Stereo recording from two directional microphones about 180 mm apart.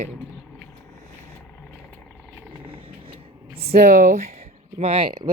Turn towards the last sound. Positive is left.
turn(degrees=-25)  # may be behind; listen again after turning